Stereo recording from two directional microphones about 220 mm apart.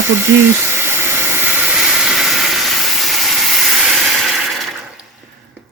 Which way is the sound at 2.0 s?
5° right (ahead or behind).